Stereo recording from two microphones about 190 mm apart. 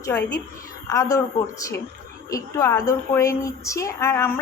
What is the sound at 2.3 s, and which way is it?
A woman's voice, 15° left (ahead or behind).